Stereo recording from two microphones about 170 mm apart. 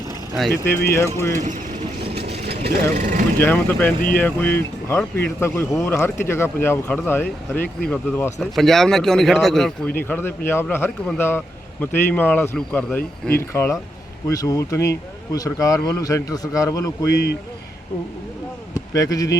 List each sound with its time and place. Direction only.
0.5 s speech: 15° left (ahead or behind)
2.6 s speech: 55° right (ahead or behind)
3.4 s speech: 10° left (ahead or behind)
18.9 s speech: 20° left (ahead or behind)